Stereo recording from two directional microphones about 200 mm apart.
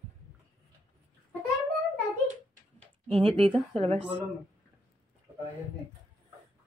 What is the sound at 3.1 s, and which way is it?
A woman's voice, 25° right (ahead or behind).